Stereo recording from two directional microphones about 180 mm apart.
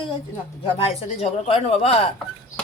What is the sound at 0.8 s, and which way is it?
Speech, 35° left (ahead or behind).